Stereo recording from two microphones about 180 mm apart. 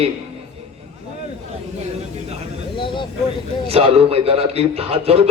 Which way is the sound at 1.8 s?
35° right (ahead or behind).